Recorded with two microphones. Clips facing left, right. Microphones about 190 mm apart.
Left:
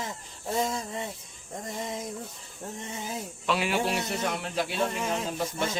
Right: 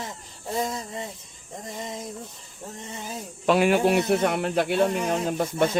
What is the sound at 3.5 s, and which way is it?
Speech, 50° right (ahead or behind).